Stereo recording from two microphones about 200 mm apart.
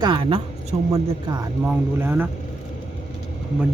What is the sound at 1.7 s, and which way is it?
Speech, 10° right (ahead or behind).